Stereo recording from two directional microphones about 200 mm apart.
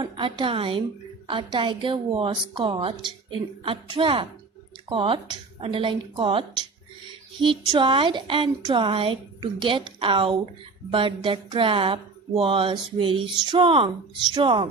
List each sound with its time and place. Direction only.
0.0 s a woman's voice: 25° right (ahead or behind)
7.4 s a woman's voice: 25° right (ahead or behind)